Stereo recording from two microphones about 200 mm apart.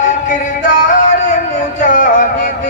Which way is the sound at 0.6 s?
35° left (ahead or behind).